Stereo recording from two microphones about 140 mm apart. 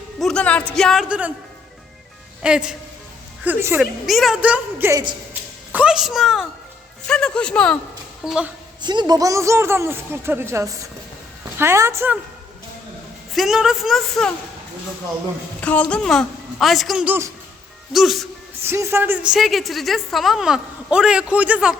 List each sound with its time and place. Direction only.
0.2 s a woman's voice: 5° left (ahead or behind)
1.0 s speech: 10° right (ahead or behind)
2.4 s speech: 5° right (ahead or behind)
3.8 s a woman's voice: centre (ahead or behind)
4.9 s speech: 30° right (ahead or behind)
5.7 s a woman's voice: 5° right (ahead or behind)
8.8 s speech: 30° right (ahead or behind)
13.3 s a woman's voice: centre (ahead or behind)
15.6 s a woman's voice: 10° left (ahead or behind)
17.1 s speech: 20° right (ahead or behind)
17.9 s a woman's voice: centre (ahead or behind)
18.7 s a woman's voice: 15° right (ahead or behind)